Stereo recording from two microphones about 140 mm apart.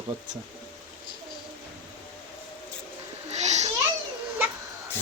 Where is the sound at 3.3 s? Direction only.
55° right (ahead or behind).